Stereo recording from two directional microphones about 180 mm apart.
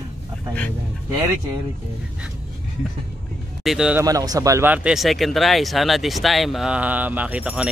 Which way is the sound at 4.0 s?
20° right (ahead or behind).